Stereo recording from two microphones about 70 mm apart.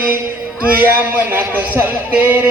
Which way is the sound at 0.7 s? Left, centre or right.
Right.